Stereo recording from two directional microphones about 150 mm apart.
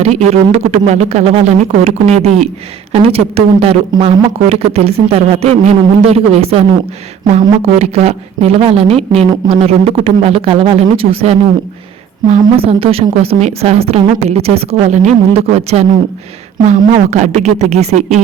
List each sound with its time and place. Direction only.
0.0 s a woman's voice: 45° right (ahead or behind)